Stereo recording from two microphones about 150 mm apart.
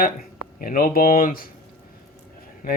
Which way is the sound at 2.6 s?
75° left (ahead or behind).